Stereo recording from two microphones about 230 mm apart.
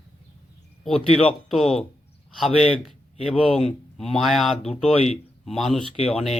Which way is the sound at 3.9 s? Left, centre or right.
Centre.